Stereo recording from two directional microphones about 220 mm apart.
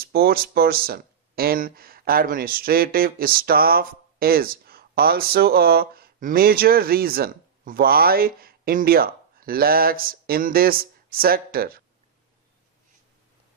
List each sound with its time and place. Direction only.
0.0 s speech: 45° right (ahead or behind)